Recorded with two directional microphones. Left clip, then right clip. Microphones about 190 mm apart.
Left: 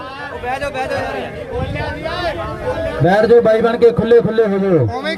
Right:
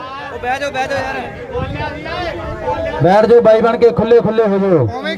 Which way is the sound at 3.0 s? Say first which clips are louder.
Right 2 dB; 20° right (ahead or behind).